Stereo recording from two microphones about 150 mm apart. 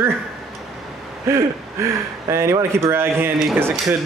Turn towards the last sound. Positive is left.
turn(degrees=-10)  # may be behind; listen again after turning